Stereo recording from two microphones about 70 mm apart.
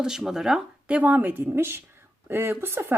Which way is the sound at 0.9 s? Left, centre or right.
Centre.